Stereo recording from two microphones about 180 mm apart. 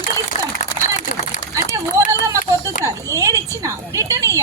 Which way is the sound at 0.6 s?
40° left (ahead or behind).